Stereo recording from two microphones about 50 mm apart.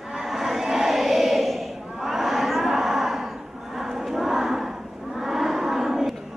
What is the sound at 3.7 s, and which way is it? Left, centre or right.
Battle cry, centre.